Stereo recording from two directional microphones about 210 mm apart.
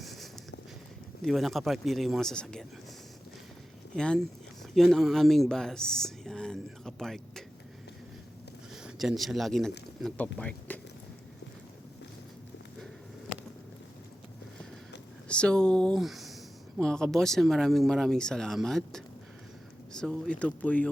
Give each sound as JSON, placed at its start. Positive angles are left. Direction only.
{"t": 0.0, "sound": "a sound", "side_deg": 0}
{"t": 1.2, "sound": "speech", "side_deg": 0}
{"t": 3.9, "sound": "speech", "side_deg": 5}
{"t": 8.7, "sound": "speech", "side_deg": 0}
{"t": 15.3, "sound": "speech", "side_deg": 5}